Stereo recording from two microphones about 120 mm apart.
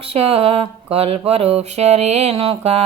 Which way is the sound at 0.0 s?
55° right (ahead or behind).